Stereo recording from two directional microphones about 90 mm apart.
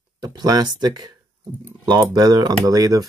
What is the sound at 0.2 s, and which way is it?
Speech, 50° right (ahead or behind).